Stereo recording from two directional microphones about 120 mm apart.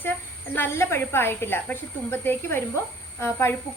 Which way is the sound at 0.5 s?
20° left (ahead or behind).